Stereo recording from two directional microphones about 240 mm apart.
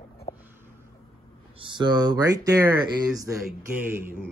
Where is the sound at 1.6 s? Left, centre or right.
Centre.